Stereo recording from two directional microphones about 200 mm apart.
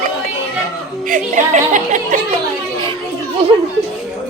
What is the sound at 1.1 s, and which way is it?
A woman's voice, 40° right (ahead or behind).